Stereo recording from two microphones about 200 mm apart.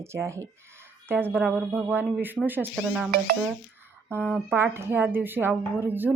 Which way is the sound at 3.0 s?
40° right (ahead or behind).